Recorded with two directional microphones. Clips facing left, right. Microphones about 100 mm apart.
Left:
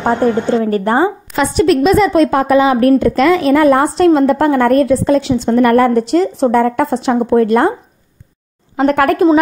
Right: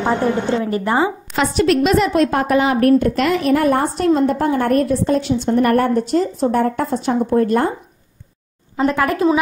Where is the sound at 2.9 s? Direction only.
90° left.